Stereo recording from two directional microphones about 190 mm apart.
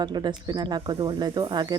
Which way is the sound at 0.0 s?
20° right (ahead or behind).